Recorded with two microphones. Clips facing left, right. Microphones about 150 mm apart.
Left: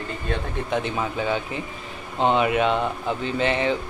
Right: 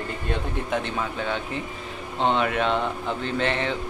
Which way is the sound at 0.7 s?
5° left (ahead or behind).